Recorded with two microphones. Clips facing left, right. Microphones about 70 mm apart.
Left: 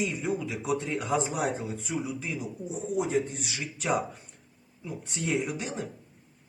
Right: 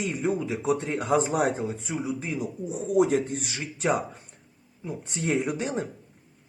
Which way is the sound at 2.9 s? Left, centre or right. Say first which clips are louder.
Right 6 dB; right.